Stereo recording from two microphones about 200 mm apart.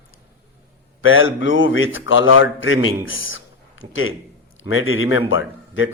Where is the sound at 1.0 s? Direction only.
80° left.